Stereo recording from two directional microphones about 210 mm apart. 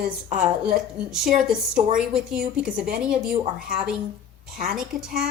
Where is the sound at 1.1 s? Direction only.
5° right (ahead or behind).